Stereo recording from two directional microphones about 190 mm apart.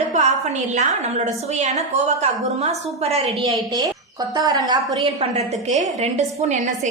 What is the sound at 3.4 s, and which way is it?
A woman's voice, 20° right (ahead or behind).